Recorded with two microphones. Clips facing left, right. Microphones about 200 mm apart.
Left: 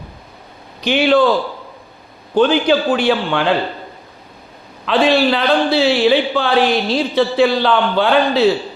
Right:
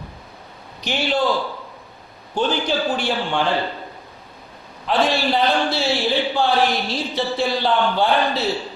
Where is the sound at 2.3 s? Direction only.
90° left.